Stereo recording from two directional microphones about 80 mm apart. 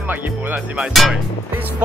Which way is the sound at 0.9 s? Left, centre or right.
Centre.